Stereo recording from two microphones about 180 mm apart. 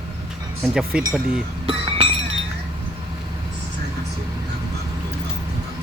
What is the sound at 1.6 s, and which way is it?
Chink, 30° right (ahead or behind).